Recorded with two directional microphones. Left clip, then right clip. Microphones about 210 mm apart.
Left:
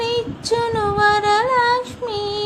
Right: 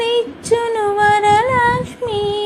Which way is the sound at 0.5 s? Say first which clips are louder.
Right 3 dB; centre (ahead or behind).